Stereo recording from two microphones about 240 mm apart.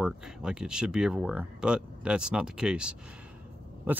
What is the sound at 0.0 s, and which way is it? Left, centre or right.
Speech, centre.